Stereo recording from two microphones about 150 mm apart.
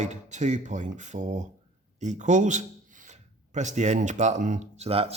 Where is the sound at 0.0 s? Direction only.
50° right (ahead or behind).